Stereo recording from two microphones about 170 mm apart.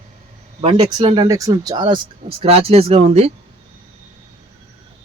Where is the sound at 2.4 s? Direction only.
35° right (ahead or behind).